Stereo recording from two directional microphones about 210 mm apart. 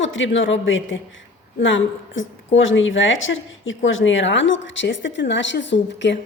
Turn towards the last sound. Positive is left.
turn(degrees=60)  # may be behind; listen again after turning